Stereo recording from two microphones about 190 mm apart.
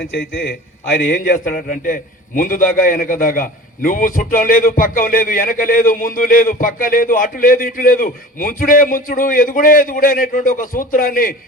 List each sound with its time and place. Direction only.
0.1 s a man's voice: 55° left (ahead or behind)